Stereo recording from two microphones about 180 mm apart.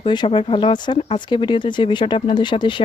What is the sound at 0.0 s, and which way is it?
Speech, 25° left (ahead or behind).